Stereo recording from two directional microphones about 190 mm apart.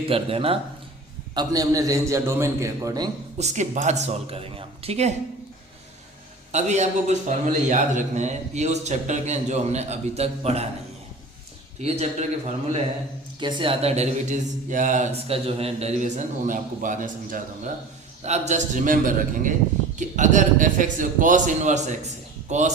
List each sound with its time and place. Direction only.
0.1 s speech: 30° right (ahead or behind)
1.4 s a man's voice: 20° right (ahead or behind)
3.3 s a man's voice: 40° right (ahead or behind)
6.5 s a man's voice: 35° right (ahead or behind)
11.8 s a man's voice: 35° right (ahead or behind)
13.4 s a man's voice: 25° right (ahead or behind)